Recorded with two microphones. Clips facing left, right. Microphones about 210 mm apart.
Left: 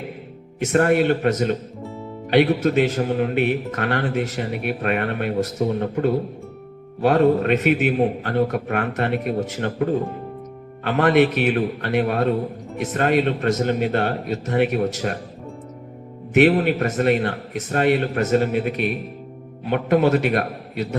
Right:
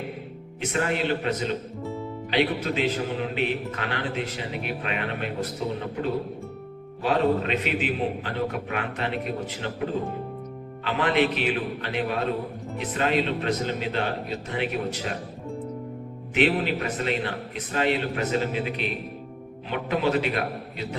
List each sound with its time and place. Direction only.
0.6 s a man's voice: 50° left (ahead or behind)
1.8 s music: centre (ahead or behind)
2.3 s a man's voice: 50° left (ahead or behind)
16.3 s a man's voice: 50° left (ahead or behind)